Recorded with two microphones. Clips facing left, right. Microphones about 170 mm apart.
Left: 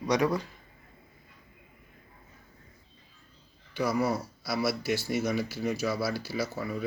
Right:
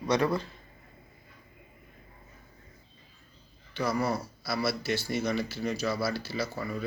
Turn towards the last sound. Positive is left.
turn(degrees=5)  # may be behind; listen again after turning